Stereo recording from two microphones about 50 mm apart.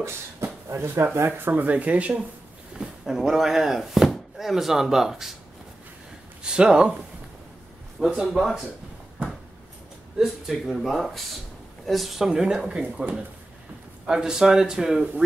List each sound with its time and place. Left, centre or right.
0.0 s speech: right
1.5 s speech: right
2.8 s a sound: centre
3.2 s speech: centre
6.4 s speech: centre
8.2 s speech: centre
10.1 s speech: centre
12.3 s speech: centre